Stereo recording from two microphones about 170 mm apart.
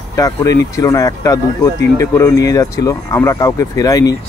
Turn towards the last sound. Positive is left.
turn(degrees=20)  # may be behind; listen again after turning